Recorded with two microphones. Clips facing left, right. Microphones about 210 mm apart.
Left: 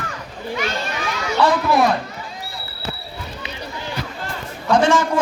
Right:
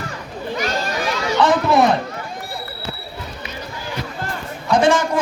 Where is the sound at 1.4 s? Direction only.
20° right (ahead or behind).